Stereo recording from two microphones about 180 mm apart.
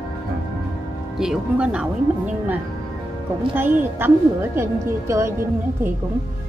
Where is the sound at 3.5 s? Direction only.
10° right (ahead or behind).